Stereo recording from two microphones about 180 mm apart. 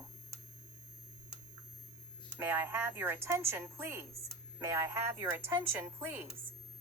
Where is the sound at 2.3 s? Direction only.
15° right (ahead or behind).